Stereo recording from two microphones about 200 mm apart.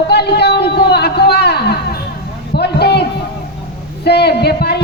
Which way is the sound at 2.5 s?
55° left (ahead or behind).